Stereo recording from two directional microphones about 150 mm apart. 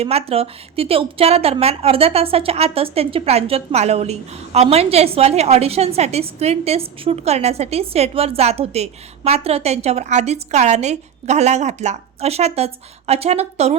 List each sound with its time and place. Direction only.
0.0 s a woman's voice: 40° right (ahead or behind)